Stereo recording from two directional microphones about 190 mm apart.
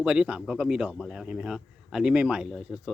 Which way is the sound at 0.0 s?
5° right (ahead or behind).